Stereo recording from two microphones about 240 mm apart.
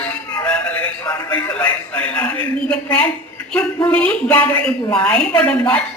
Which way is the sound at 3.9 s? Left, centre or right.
Centre.